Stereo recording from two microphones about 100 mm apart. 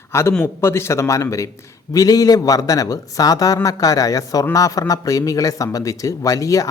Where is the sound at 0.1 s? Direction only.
25° left (ahead or behind).